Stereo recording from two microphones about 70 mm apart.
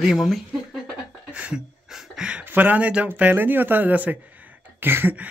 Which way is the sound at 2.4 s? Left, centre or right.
Right.